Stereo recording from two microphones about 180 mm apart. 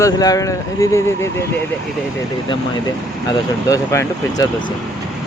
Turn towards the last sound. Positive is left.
turn(degrees=15)  # may be behind; listen again after turning